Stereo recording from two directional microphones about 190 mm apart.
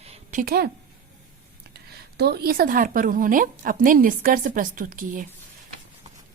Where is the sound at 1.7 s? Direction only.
60° right (ahead or behind).